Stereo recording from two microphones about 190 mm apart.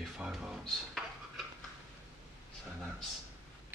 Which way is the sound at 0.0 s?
Centre (ahead or behind).